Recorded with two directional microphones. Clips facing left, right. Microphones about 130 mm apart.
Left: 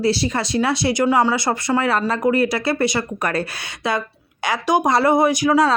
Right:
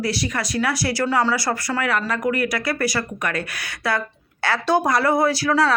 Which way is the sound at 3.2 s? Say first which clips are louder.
Left 5 dB; 35° left (ahead or behind).